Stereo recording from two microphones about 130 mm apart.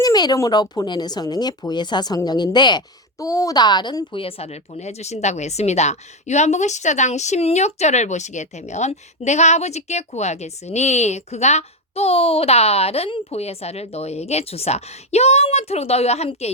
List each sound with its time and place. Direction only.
0.0 s a woman's voice: 30° left (ahead or behind); by 16.5 s 55° left (ahead or behind)